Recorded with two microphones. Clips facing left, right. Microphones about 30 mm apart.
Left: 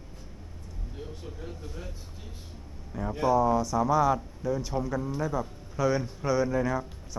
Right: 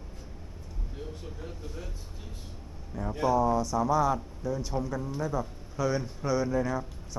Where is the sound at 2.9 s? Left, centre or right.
Centre.